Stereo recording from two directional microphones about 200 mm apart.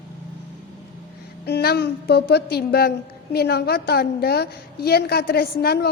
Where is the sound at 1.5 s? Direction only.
50° left (ahead or behind).